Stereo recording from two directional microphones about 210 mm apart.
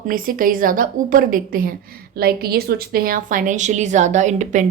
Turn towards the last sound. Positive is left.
turn(degrees=-35)  # may be behind; listen again after turning